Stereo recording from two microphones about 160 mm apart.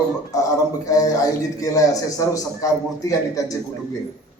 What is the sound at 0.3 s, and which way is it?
A man's voice, 20° left (ahead or behind).